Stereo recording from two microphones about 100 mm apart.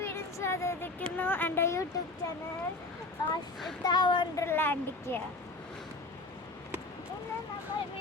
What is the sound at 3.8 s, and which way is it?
Speech, 50° left (ahead or behind).